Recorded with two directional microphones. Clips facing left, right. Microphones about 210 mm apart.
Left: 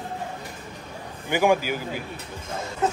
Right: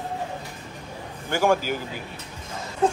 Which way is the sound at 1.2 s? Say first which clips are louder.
Left 1 dB; 15° left (ahead or behind).